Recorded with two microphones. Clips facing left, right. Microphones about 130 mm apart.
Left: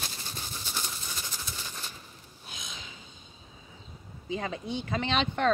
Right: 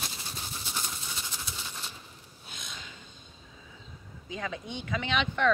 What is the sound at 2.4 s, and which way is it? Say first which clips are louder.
Snort: left 1 dB; 40° left (ahead or behind).